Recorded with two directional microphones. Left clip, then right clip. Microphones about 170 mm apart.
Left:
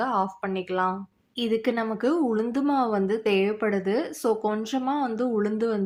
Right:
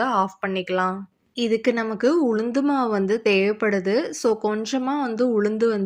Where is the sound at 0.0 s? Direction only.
15° right (ahead or behind).